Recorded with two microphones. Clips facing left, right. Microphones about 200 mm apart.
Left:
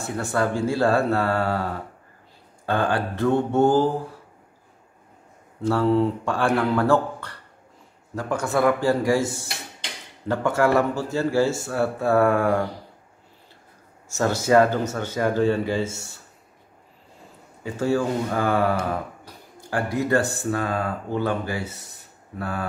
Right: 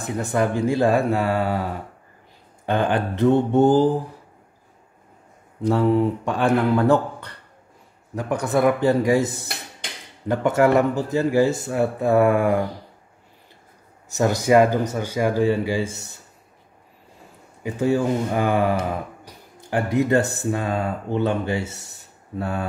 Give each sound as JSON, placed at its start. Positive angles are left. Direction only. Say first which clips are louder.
{"t": 0.0, "sound": "speech", "louder": "right 2 dB", "side_deg": -15}
{"t": 5.6, "sound": "speech", "louder": "right 1 dB", "side_deg": -15}
{"t": 14.0, "sound": "speech", "louder": "right 2 dB", "side_deg": -15}
{"t": 17.6, "sound": "speech", "louder": "right 2 dB", "side_deg": -15}